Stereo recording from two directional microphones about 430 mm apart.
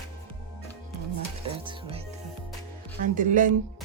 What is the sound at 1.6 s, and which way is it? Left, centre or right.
Music, centre.